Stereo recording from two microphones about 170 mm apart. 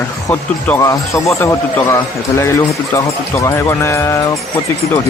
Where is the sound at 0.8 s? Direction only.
20° left (ahead or behind).